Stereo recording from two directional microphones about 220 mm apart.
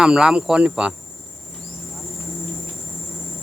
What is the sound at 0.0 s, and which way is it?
Speech, 5° right (ahead or behind).